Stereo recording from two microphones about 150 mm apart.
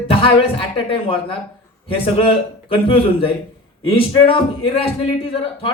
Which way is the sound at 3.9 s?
35° left (ahead or behind).